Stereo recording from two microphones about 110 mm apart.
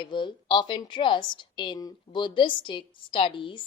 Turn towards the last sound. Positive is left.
turn(degrees=50)  # may be behind; listen again after turning